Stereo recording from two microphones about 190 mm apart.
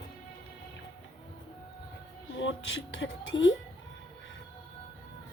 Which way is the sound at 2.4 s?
85° left.